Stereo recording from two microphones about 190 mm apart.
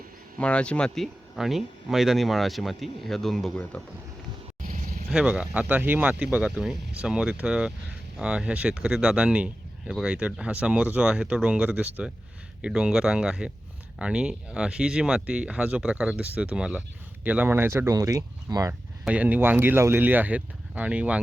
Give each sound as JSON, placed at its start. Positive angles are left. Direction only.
{"t": 0.3, "sound": "speech", "side_deg": 5}
{"t": 4.6, "sound": "vehicle", "side_deg": -45}
{"t": 5.1, "sound": "speech", "side_deg": -5}
{"t": 19.0, "sound": "speech", "side_deg": -5}